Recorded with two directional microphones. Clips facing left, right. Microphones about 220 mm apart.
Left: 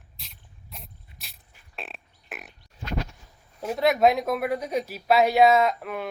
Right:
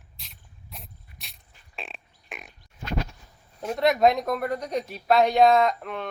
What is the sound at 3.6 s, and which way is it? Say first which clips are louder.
Speech: even; centre (ahead or behind).